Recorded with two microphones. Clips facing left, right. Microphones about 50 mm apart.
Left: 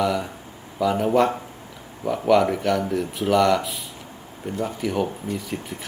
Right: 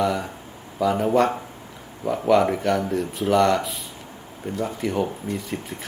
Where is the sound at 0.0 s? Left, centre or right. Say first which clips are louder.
Even; centre.